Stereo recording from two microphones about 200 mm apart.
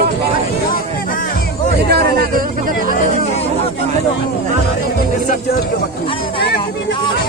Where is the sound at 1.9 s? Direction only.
50° right (ahead or behind).